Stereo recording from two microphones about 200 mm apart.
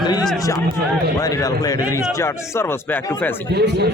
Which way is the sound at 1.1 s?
15° left (ahead or behind).